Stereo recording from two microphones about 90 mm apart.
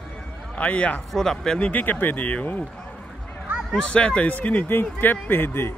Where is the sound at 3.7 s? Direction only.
10° left (ahead or behind).